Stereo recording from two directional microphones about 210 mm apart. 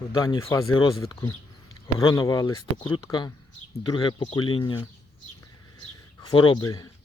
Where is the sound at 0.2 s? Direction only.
15° left (ahead or behind).